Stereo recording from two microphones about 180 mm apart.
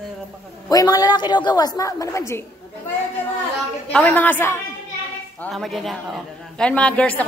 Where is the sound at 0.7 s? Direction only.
20° left (ahead or behind).